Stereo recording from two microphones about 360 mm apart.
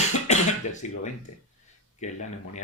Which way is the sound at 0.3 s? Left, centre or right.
Centre.